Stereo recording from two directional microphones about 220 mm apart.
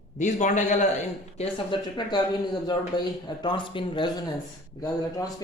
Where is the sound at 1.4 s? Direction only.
20° left (ahead or behind).